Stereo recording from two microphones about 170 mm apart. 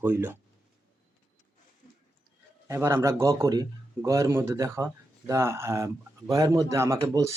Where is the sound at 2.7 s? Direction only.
15° right (ahead or behind).